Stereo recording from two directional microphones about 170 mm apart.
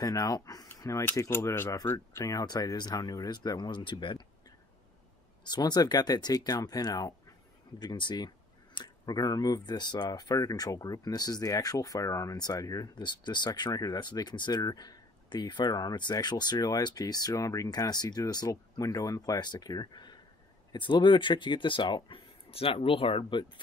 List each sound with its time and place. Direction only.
0.0 s speech: 20° left (ahead or behind)
5.4 s speech: 25° left (ahead or behind)